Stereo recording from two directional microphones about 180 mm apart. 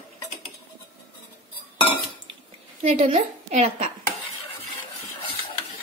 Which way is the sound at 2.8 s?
35° right (ahead or behind).